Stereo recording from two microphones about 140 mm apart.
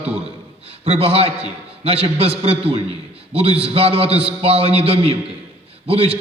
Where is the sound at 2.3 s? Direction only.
45° right (ahead or behind).